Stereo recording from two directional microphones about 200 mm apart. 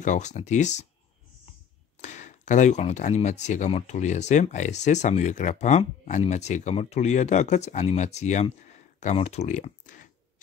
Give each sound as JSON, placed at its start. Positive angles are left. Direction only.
{"t": 0.0, "sound": "speech", "side_deg": 35}
{"t": 2.0, "sound": "speech", "side_deg": 35}